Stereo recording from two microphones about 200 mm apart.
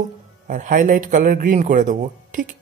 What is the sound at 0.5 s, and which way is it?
A man's voice, 45° right (ahead or behind).